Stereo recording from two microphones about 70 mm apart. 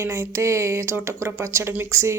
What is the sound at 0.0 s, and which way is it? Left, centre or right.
Speech, right.